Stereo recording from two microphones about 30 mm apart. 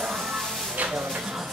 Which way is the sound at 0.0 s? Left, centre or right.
Centre.